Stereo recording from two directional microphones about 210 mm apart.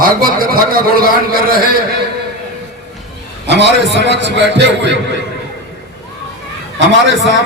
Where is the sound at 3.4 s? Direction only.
55° right (ahead or behind).